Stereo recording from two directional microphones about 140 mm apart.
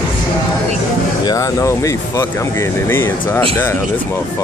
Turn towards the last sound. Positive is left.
turn(degrees=15)  # may be behind; listen again after turning